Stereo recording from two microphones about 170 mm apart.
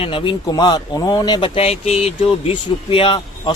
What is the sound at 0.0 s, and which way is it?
Speech, 30° left (ahead or behind).